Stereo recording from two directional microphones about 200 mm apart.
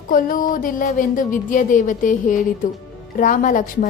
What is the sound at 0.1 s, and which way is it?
Speech, 45° left (ahead or behind).